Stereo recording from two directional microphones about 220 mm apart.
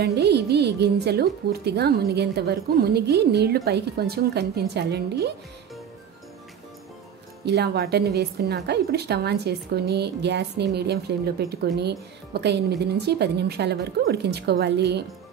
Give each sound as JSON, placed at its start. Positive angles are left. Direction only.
{"t": 0.0, "sound": "a woman's voice", "side_deg": -50}
{"t": 7.4, "sound": "a woman's voice", "side_deg": -50}